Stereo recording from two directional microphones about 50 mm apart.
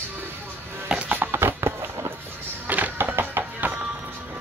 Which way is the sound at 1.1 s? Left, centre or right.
Right.